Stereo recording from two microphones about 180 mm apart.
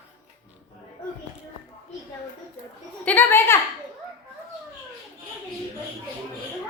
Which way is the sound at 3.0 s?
10° left (ahead or behind).